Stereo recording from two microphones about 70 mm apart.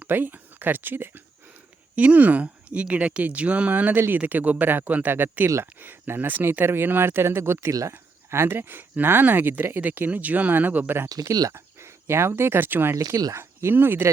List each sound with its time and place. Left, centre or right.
0.0 s speech: right
7.7 s speech: right
8.3 s speech: right
11.1 s speech: right
11.5 s speech: right